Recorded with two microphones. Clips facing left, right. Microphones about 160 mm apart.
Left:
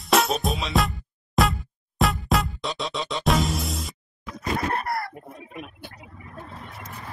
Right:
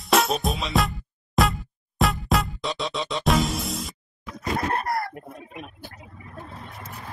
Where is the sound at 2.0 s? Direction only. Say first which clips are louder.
Even; centre (ahead or behind).